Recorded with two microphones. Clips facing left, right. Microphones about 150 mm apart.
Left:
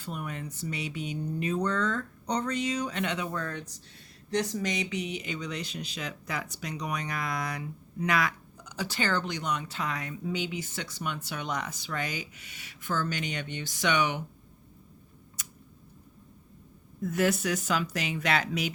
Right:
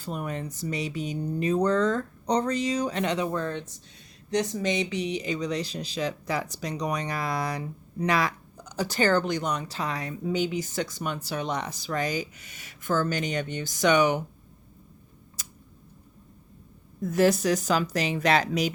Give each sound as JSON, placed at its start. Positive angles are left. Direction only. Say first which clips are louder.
{"t": 0.0, "sound": "speech", "louder": "right 5 dB", "side_deg": -35}
{"t": 15.4, "sound": "tick-tock", "louder": "even", "side_deg": -30}
{"t": 17.0, "sound": "speech", "louder": "right 5 dB", "side_deg": -35}